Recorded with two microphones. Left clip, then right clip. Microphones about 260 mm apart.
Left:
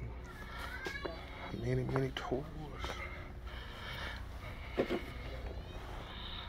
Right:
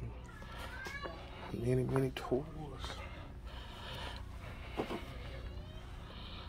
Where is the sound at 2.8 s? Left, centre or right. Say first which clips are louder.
Left 5 dB; centre.